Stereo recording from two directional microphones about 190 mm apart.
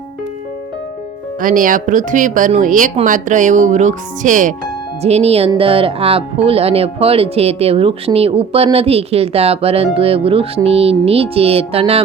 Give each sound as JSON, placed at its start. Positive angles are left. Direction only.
{"t": 1.4, "sound": "speech", "side_deg": -45}